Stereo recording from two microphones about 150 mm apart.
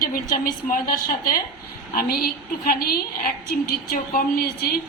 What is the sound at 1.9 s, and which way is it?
A woman's voice, 80° left.